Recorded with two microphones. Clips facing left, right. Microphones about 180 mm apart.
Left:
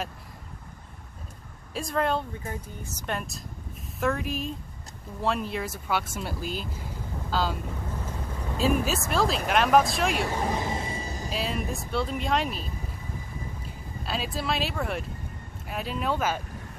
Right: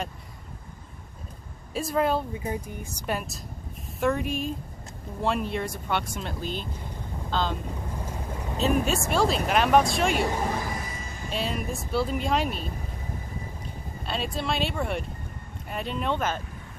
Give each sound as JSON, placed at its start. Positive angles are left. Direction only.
{"t": 1.7, "sound": "speech", "side_deg": -5}
{"t": 8.5, "sound": "speech", "side_deg": 5}
{"t": 10.5, "sound": "music", "side_deg": 25}
{"t": 11.2, "sound": "speech", "side_deg": 0}
{"t": 14.0, "sound": "speech", "side_deg": 0}